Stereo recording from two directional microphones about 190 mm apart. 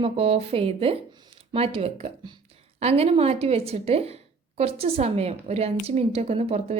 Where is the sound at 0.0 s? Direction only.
30° right (ahead or behind).